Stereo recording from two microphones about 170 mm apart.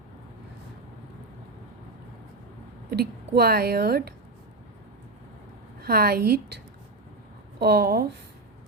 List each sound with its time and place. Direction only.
2.9 s a woman's voice: 65° right (ahead or behind)
5.8 s a woman's voice: 65° right (ahead or behind)
7.6 s a woman's voice: 70° right (ahead or behind)